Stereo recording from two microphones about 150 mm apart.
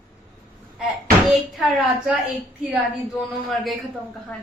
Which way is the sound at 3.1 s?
Centre (ahead or behind).